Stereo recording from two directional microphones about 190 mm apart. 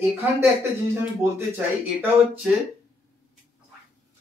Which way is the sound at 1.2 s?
10° right (ahead or behind).